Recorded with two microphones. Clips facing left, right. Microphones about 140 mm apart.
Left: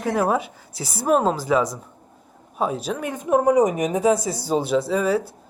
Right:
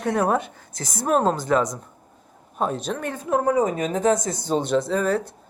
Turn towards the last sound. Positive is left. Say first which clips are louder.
# left 1 dB
turn(degrees=5)  # may be behind; listen again after turning